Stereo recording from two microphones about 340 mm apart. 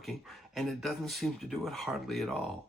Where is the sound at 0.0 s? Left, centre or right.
Centre.